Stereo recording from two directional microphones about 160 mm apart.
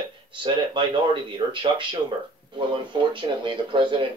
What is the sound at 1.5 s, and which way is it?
Speech, 30° right (ahead or behind).